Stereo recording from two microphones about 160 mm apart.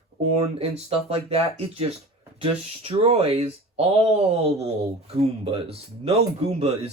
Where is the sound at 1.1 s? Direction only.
35° right (ahead or behind).